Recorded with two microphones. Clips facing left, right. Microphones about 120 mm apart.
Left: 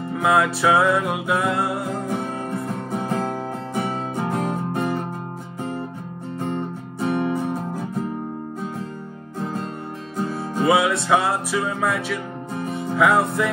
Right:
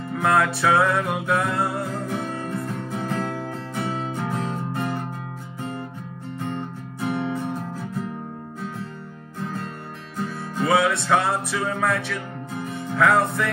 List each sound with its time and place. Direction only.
0.1 s music: 5° left (ahead or behind)
1.8 s music: 25° left (ahead or behind)
4.3 s music: 55° left (ahead or behind)
4.7 s music: 20° left (ahead or behind)
7.0 s music: 25° left (ahead or behind)
9.4 s music: 25° left (ahead or behind)
10.9 s music: centre (ahead or behind)